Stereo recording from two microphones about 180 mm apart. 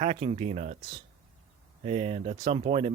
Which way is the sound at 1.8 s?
35° right (ahead or behind).